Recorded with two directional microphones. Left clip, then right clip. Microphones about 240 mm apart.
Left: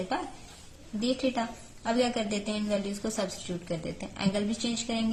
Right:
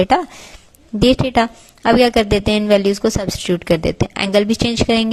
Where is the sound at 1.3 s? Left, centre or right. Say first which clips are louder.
Right 16 dB; right.